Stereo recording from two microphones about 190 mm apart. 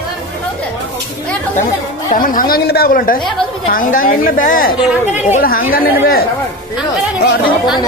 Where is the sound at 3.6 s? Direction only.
45° left (ahead or behind).